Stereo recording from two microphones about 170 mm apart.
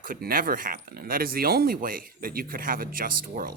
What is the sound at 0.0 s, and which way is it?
Speech, 55° right (ahead or behind).